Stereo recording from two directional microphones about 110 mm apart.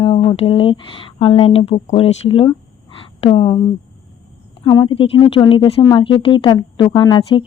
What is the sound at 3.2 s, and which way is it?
Speech, 55° left (ahead or behind).